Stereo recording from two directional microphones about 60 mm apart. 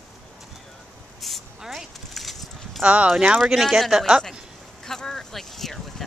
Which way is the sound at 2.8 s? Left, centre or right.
Right.